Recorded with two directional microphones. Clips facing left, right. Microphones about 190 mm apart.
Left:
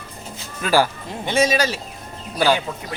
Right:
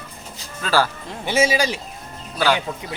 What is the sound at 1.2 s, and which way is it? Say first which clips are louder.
Speech: even; 10° right (ahead or behind).